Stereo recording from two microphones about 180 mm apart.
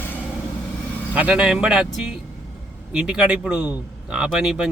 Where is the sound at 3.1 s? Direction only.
5° right (ahead or behind).